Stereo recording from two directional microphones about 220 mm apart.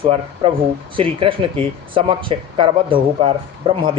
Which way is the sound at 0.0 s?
25° right (ahead or behind).